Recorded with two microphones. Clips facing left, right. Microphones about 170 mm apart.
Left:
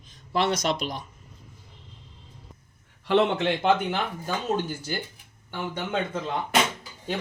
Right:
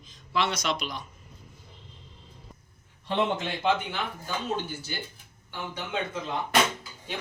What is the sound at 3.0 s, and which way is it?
Speech, 70° left (ahead or behind).